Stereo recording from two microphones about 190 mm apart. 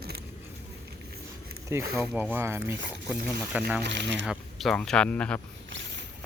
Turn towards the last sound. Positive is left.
turn(degrees=5)  # may be behind; listen again after turning